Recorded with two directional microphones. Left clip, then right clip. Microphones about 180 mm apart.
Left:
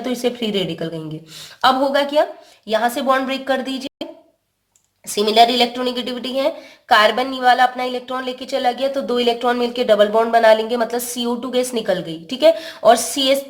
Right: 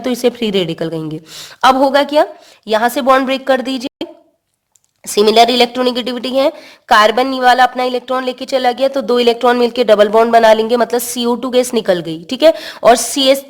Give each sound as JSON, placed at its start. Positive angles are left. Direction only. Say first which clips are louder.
{"t": 0.0, "sound": "speech", "louder": "right 6 dB", "side_deg": -50}
{"t": 5.1, "sound": "speech", "louder": "right 5 dB", "side_deg": -55}